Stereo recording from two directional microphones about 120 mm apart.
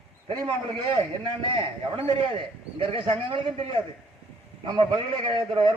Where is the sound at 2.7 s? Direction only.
50° right (ahead or behind).